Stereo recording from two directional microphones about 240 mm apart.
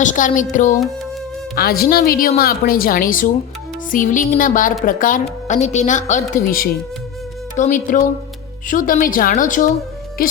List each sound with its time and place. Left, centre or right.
0.0 s a woman's voice: left
1.5 s a woman's voice: left